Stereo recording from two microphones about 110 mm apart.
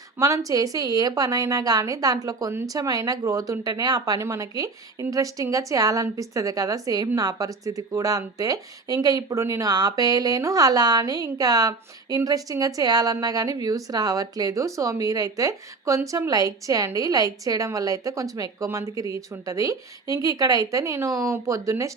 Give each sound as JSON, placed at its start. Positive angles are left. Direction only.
{"t": 0.2, "sound": "speech", "side_deg": -30}